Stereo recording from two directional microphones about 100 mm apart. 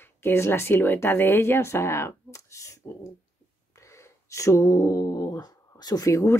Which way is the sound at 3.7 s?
30° left (ahead or behind).